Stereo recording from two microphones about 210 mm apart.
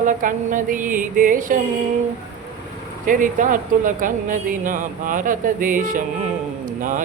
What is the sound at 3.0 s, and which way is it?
Speech, 40° right (ahead or behind).